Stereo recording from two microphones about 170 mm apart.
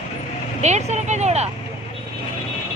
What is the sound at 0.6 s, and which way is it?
Speech, 40° right (ahead or behind).